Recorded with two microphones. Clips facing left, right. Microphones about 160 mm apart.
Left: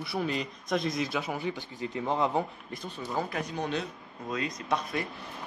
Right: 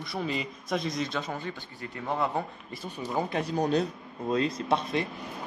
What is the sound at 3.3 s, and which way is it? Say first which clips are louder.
Speech: right 6 dB; 35° right (ahead or behind).